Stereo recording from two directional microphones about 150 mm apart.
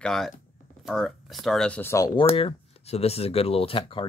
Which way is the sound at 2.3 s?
40° left (ahead or behind).